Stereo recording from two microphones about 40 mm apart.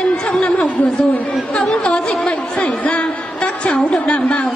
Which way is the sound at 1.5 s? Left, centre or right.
Left.